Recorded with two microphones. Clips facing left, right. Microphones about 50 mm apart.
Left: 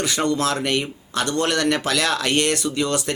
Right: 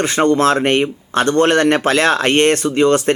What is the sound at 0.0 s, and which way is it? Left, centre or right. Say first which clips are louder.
Speech: right 8 dB; right.